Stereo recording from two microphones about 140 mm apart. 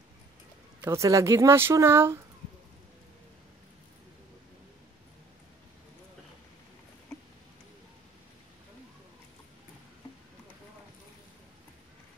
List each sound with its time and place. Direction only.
0.8 s speech: 20° right (ahead or behind)